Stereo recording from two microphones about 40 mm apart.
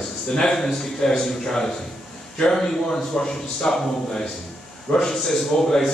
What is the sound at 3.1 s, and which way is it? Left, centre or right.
Speech, centre.